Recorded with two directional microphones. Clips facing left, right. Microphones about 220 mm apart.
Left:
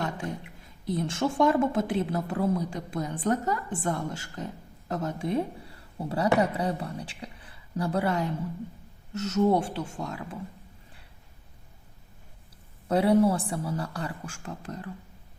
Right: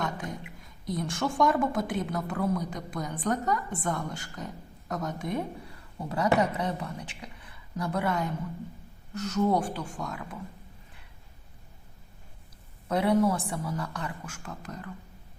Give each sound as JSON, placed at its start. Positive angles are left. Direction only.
{"t": 0.0, "sound": "a sound", "side_deg": 30}
{"t": 0.9, "sound": "a woman's voice", "side_deg": 25}
{"t": 12.9, "sound": "a woman's voice", "side_deg": 30}